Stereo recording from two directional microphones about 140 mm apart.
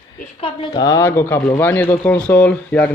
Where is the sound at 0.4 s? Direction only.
30° left (ahead or behind).